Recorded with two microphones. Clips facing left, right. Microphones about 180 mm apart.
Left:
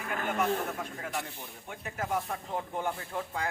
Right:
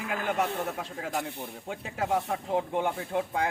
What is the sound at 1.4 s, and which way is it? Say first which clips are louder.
Speech: right 6 dB; 85° right.